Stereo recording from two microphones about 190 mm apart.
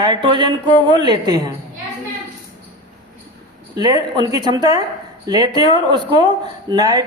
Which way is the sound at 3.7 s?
20° right (ahead or behind).